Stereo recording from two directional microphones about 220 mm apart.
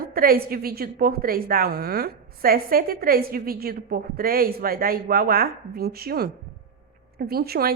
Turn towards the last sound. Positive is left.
turn(degrees=-45)  # may be behind; listen again after turning